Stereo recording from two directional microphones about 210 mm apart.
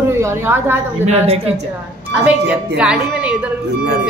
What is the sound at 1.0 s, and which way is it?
Speech, 30° right (ahead or behind).